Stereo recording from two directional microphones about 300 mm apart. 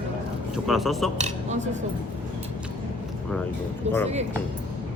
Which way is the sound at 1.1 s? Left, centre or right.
Right.